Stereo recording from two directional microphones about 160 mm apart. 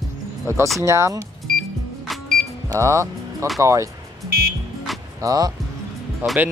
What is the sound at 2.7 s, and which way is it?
Speech, 20° right (ahead or behind).